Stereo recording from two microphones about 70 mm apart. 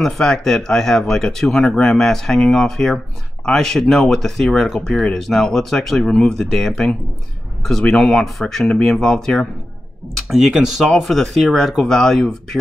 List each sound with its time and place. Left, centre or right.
0.0 s speech: centre
10.1 s speech: centre